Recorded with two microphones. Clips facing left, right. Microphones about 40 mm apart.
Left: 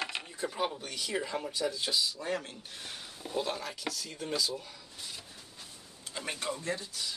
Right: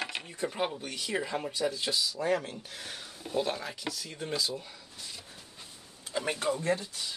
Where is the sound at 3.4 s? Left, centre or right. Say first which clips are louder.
Right 2 dB; centre.